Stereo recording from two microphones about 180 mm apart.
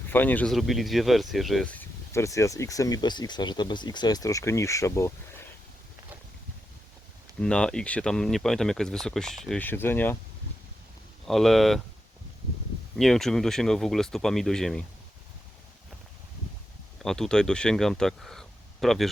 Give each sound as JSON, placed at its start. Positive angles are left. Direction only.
{"t": 0.1, "sound": "speech", "side_deg": 10}
{"t": 7.3, "sound": "speech", "side_deg": 5}
{"t": 11.3, "sound": "speech", "side_deg": 0}
{"t": 13.0, "sound": "speech", "side_deg": 0}
{"t": 17.0, "sound": "speech", "side_deg": 5}